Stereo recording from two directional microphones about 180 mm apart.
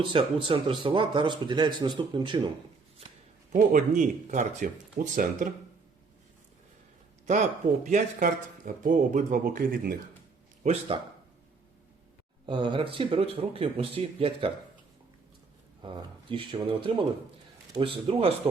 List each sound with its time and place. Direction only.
0.0 s speech: 30° right (ahead or behind)
3.5 s speech: 45° right (ahead or behind)
7.3 s speech: 45° right (ahead or behind)
10.6 s speech: 35° right (ahead or behind)
12.5 s speech: 25° right (ahead or behind)
15.8 s speech: 25° right (ahead or behind)